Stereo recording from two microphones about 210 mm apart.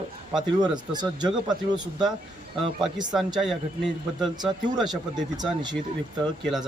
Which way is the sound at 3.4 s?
Centre (ahead or behind).